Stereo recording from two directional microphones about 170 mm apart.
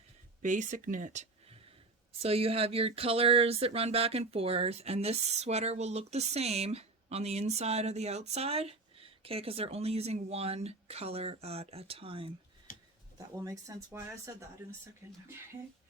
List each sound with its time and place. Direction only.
0.4 s speech: 50° right (ahead or behind); by 12.3 s 30° right (ahead or behind)
13.1 s speech: 20° right (ahead or behind)
15.0 s speech: 15° right (ahead or behind)